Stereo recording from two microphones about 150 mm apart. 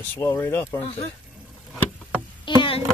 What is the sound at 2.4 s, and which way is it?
Insect, 35° left (ahead or behind).